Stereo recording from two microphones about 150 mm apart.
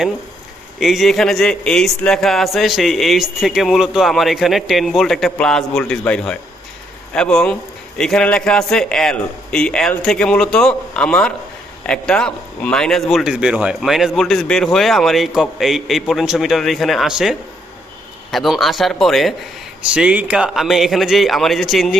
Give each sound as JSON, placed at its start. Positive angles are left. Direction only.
{"t": 0.8, "sound": "speech", "side_deg": 0}